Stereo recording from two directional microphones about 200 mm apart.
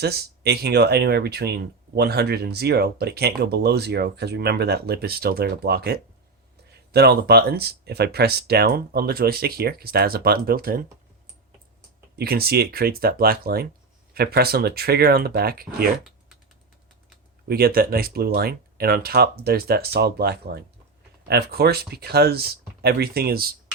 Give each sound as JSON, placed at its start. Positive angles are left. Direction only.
{"t": 0.0, "sound": "speech", "side_deg": -50}
{"t": 12.1, "sound": "speech", "side_deg": -50}
{"t": 17.5, "sound": "speech", "side_deg": -50}